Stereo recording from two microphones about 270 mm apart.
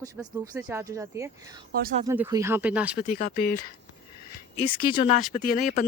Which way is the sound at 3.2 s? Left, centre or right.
Left.